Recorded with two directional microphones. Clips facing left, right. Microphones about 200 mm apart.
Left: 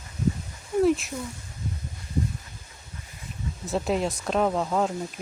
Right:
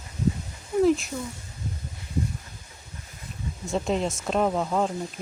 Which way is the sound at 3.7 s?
Centre (ahead or behind).